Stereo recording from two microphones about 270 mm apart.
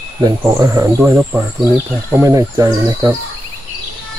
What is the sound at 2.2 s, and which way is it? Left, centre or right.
Speech, centre.